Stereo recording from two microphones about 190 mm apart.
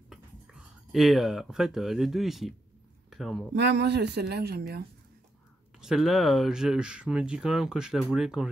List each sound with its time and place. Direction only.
0.1 s speech: centre (ahead or behind)
3.5 s a woman's voice: 60° right (ahead or behind)
5.8 s speech: centre (ahead or behind)